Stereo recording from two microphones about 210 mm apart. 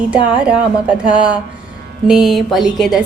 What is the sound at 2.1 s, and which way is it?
Speech, centre (ahead or behind).